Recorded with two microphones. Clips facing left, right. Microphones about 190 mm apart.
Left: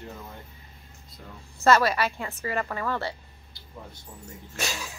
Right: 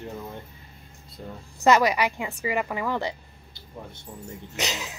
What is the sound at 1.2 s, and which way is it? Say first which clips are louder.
Speech: right 7 dB; 30° right (ahead or behind).